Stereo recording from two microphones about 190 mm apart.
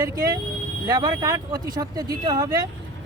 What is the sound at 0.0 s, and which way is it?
Speech, 20° right (ahead or behind).